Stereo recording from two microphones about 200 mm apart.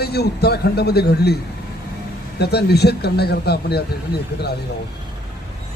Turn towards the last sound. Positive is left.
turn(degrees=55)  # may be behind; listen again after turning